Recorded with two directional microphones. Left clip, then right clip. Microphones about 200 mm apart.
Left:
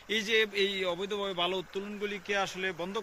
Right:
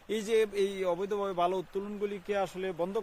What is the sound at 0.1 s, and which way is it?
A man's voice, 45° right (ahead or behind).